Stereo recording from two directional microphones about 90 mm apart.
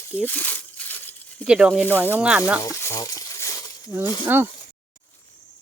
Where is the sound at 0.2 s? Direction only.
20° left (ahead or behind).